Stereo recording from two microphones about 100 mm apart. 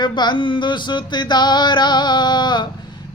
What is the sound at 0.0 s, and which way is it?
Speech, 50° left (ahead or behind).